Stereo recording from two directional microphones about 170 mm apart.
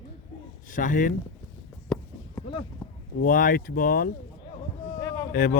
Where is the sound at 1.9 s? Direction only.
5° left (ahead or behind).